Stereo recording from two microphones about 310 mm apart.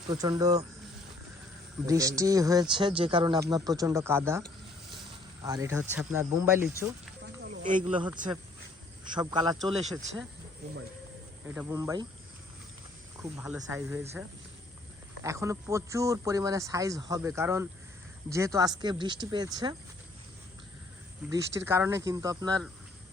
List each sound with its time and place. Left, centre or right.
0.1 s speech: centre
1.9 s speech: centre
7.2 s speech: right; by 10.0 s centre
11.4 s speech: centre
13.2 s speech: centre
21.2 s speech: centre